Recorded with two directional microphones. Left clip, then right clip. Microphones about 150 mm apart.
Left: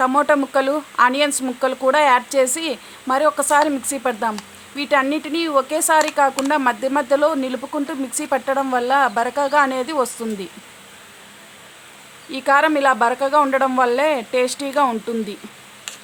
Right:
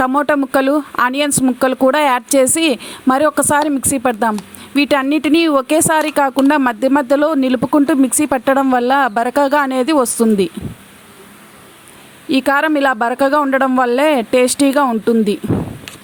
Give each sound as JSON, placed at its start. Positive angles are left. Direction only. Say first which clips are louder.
{"t": 0.0, "sound": "speech", "louder": "right 2 dB", "side_deg": -50}
{"t": 12.3, "sound": "speech", "louder": "right 2 dB", "side_deg": -50}